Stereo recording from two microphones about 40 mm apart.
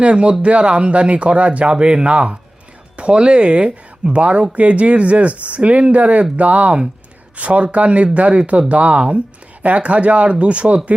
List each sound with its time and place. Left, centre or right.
0.0 s speech: right